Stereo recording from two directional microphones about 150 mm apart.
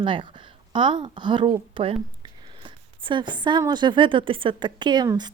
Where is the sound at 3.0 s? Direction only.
30° right (ahead or behind).